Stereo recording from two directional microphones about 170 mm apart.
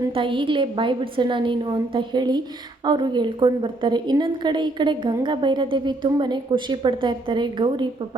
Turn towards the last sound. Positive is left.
turn(degrees=-25)  # may be behind; listen again after turning